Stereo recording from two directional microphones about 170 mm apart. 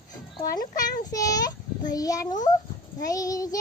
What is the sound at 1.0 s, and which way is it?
A child's voice, 20° left (ahead or behind).